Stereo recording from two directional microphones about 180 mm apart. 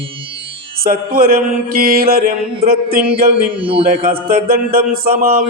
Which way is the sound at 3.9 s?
50° right (ahead or behind).